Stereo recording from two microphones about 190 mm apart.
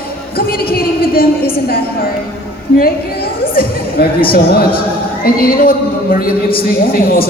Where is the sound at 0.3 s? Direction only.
50° left (ahead or behind).